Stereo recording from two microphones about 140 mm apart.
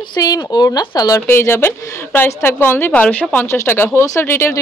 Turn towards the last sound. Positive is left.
turn(degrees=15)  # may be behind; listen again after turning